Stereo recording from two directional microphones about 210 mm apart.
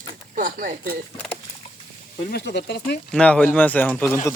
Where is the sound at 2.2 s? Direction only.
50° left (ahead or behind).